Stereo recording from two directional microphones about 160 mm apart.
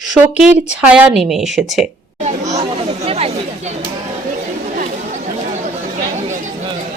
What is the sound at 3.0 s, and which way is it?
Speech, 40° right (ahead or behind).